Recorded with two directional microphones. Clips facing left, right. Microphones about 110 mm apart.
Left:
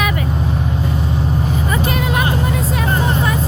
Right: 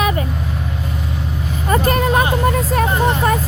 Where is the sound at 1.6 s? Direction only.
45° right (ahead or behind).